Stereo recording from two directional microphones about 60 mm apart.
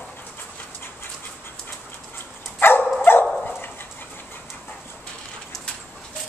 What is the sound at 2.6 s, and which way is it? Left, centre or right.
Dog, left.